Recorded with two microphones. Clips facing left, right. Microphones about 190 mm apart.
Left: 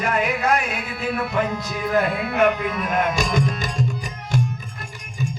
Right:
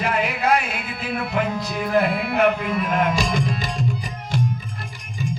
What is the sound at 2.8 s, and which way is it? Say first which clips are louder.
Tabla: right 1 dB; 45° left (ahead or behind).